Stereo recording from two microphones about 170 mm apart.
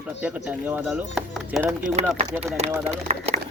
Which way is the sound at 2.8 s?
40° right (ahead or behind).